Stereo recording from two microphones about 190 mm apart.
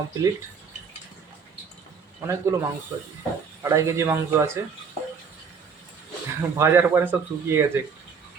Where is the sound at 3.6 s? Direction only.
15° right (ahead or behind).